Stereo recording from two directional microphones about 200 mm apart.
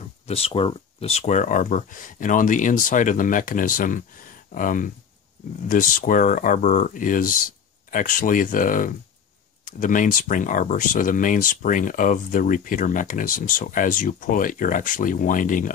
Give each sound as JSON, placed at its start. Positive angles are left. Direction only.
{"t": 0.3, "sound": "speech", "side_deg": 30}